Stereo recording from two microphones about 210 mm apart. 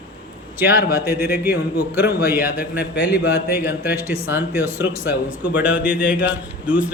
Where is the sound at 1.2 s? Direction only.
45° left (ahead or behind).